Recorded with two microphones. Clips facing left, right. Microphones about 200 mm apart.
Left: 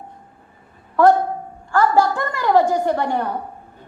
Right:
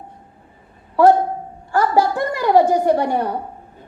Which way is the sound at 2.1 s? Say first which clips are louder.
Right 2 dB; 15° right (ahead or behind).